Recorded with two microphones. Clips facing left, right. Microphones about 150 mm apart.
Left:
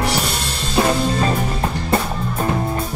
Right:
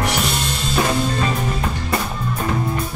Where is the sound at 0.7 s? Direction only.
30° left (ahead or behind).